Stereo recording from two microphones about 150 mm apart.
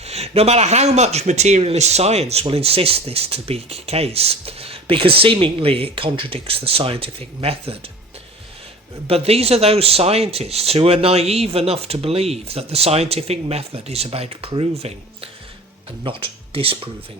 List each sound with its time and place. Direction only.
0.0 s speech: 45° right (ahead or behind)
9.0 s speech: 40° right (ahead or behind)